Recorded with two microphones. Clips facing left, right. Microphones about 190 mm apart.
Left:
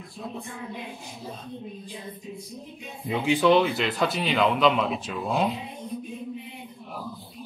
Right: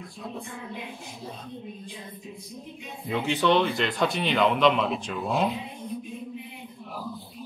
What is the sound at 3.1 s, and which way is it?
A man's voice, 10° left (ahead or behind).